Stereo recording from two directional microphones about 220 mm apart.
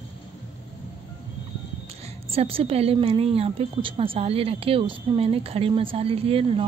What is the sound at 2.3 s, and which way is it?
A woman's voice, 25° right (ahead or behind).